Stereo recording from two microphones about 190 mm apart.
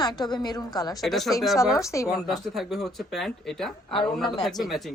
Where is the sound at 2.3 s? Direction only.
Centre (ahead or behind).